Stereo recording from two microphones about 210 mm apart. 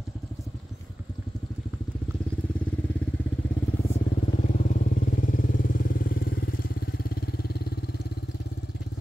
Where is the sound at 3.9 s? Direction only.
30° left (ahead or behind); by 8.3 s 50° left (ahead or behind).